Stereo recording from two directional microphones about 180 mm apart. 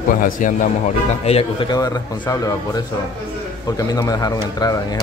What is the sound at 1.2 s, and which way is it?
Speech, 35° left (ahead or behind).